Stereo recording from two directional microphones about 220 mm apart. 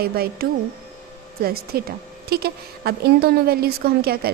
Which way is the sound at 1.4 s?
45° right (ahead or behind).